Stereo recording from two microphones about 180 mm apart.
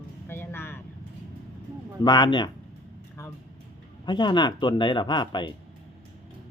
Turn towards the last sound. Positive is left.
turn(degrees=25)  # may be behind; listen again after turning